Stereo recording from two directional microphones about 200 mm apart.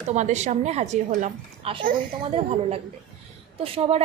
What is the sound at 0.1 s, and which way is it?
A woman's voice, 35° right (ahead or behind).